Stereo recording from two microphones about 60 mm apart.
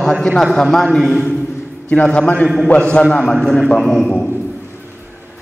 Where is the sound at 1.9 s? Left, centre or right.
Left.